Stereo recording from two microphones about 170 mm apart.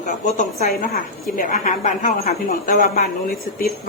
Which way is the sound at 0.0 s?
45° left (ahead or behind).